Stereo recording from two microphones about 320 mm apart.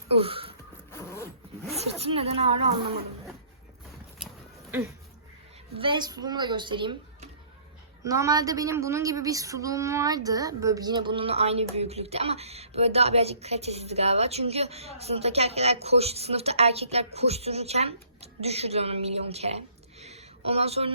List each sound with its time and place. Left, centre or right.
0.1 s speech: centre
0.9 s zipper: centre
1.7 s speech: centre
4.2 s a sound: centre
5.7 s a woman's voice: centre